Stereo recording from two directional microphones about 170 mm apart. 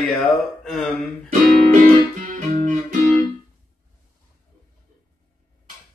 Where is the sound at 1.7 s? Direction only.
45° right (ahead or behind).